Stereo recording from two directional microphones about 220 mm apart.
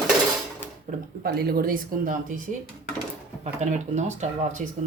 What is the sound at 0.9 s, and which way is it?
Speech, 45° right (ahead or behind).